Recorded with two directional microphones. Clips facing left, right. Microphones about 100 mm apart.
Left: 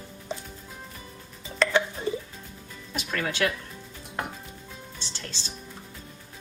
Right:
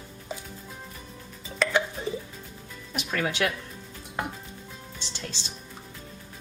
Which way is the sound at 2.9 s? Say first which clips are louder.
Right 1 dB; 15° right (ahead or behind).